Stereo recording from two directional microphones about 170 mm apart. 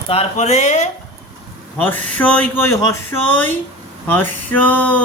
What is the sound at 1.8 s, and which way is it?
Speech, 10° left (ahead or behind).